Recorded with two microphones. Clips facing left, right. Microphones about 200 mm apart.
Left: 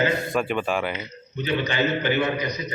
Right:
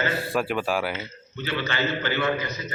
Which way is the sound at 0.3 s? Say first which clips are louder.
Left 1 dB; 5° right (ahead or behind).